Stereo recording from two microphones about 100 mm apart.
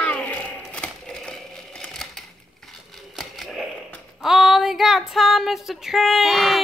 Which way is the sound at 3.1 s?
Centre (ahead or behind).